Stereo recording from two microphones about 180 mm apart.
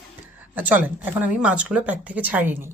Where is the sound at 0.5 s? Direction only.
10° right (ahead or behind).